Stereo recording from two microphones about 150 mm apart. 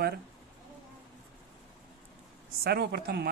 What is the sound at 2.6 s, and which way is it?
Speech, 90° right.